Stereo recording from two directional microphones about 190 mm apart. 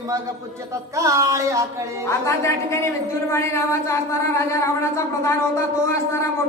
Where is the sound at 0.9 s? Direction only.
15° right (ahead or behind).